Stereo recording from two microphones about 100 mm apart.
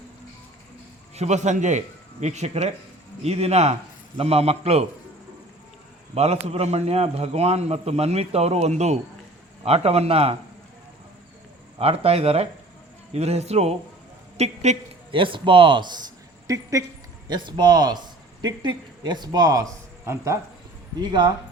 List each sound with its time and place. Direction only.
1.2 s a man's voice: 90° right
6.1 s a man's voice: 90° right
11.8 s a man's voice: 85° right
15.1 s speech: 60° right (ahead or behind)
16.5 s speech: 35° right (ahead or behind)
17.2 s speech: 45° right (ahead or behind); by 20.4 s 30° right (ahead or behind)
21.0 s speech: 50° right (ahead or behind)